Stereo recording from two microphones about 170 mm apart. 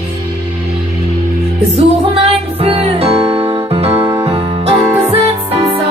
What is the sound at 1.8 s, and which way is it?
Music, 35° right (ahead or behind).